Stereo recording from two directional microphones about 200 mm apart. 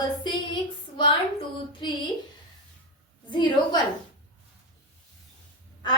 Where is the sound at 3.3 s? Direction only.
20° left (ahead or behind).